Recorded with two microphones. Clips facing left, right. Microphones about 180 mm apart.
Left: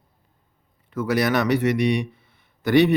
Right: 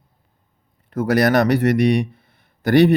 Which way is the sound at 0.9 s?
40° right (ahead or behind).